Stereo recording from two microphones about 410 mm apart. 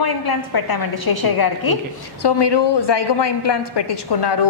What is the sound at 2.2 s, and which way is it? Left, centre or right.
A woman's voice, left.